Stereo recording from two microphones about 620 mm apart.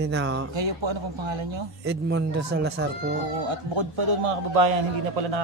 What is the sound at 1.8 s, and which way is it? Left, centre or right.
Speech, centre.